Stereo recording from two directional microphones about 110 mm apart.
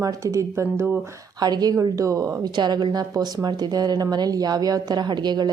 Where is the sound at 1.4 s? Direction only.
35° right (ahead or behind).